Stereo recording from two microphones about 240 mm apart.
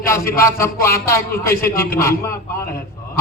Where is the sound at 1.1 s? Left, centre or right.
Centre.